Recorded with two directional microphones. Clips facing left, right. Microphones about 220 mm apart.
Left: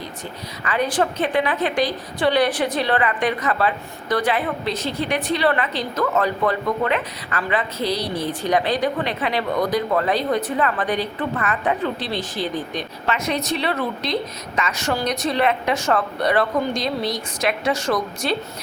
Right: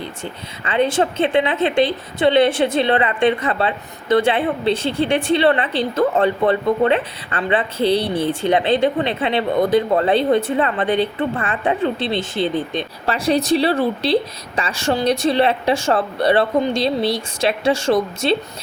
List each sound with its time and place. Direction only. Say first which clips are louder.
0.6 s a woman's voice: right 4 dB; 25° right (ahead or behind)